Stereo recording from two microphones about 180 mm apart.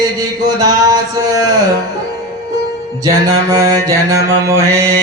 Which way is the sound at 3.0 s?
20° right (ahead or behind).